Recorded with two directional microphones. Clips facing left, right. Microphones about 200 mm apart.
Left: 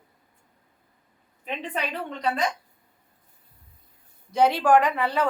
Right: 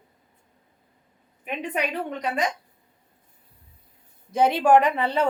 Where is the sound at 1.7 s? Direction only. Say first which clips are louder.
Right 5 dB; 15° right (ahead or behind).